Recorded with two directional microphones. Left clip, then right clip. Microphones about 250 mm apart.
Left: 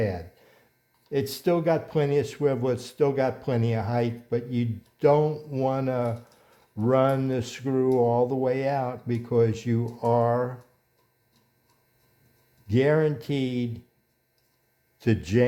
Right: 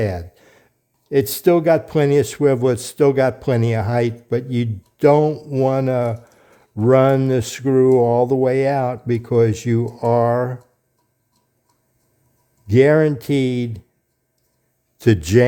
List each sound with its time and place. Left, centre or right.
0.0 s a sound: right
1.1 s speech: right
12.6 s speech: right
14.9 s speech: right